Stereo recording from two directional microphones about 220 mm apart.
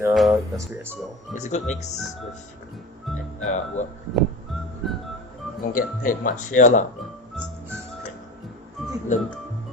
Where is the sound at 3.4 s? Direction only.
35° left (ahead or behind).